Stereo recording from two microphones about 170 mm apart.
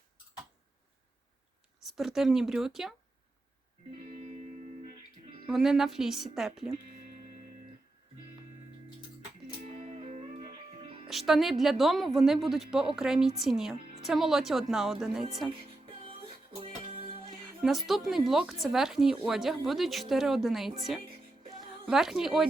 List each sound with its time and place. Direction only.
1.8 s a woman's voice: centre (ahead or behind)
5.5 s a woman's voice: centre (ahead or behind)
9.6 s music: 40° right (ahead or behind)
11.1 s a woman's voice: centre (ahead or behind)
16.6 s music: 35° right (ahead or behind)
17.6 s a woman's voice: centre (ahead or behind)